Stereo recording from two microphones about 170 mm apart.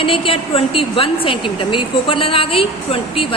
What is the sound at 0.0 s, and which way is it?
A woman's voice, 30° left (ahead or behind).